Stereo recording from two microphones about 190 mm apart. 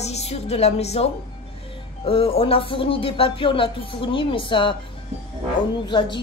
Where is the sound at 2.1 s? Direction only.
30° left (ahead or behind).